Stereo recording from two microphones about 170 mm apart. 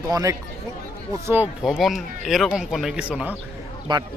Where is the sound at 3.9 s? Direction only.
30° right (ahead or behind).